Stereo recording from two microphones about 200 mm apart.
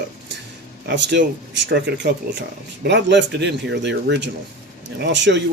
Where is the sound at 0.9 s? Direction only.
60° right (ahead or behind).